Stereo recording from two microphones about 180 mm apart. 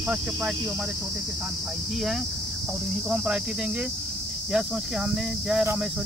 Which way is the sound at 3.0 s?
5° right (ahead or behind).